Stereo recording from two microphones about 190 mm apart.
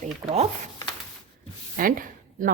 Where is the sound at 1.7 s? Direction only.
45° right (ahead or behind).